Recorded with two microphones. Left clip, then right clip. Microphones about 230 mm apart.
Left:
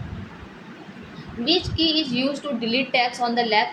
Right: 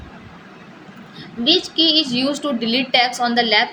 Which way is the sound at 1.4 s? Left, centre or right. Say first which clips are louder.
Right 6 dB; right.